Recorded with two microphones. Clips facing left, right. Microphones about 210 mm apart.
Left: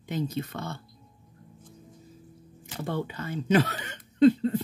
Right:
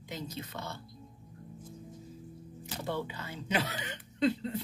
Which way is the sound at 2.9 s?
50° left (ahead or behind).